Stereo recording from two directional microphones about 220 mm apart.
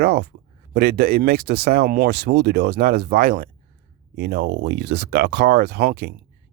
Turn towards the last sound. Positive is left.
turn(degrees=-45)  # may be behind; listen again after turning